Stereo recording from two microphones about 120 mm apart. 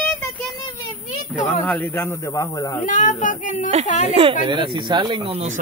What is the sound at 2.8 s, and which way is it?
Speech, 90° left.